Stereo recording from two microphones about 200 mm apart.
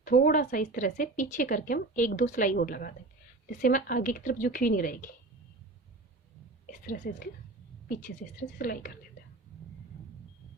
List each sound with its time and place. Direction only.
0.0 s a woman's voice: 45° left (ahead or behind)
6.7 s a woman's voice: 45° left (ahead or behind)
8.5 s a woman's voice: 45° left (ahead or behind)